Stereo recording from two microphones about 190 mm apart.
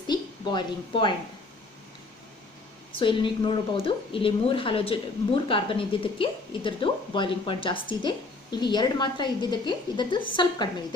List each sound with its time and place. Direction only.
0.1 s speech: 25° left (ahead or behind)
2.9 s speech: 25° left (ahead or behind)